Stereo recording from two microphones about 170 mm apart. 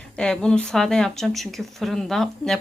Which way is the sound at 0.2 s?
5° left (ahead or behind).